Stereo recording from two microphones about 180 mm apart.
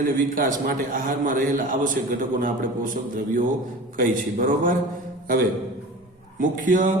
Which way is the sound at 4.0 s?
50° right (ahead or behind).